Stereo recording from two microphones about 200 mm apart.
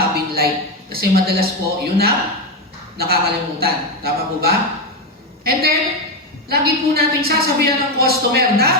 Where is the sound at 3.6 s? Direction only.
50° right (ahead or behind).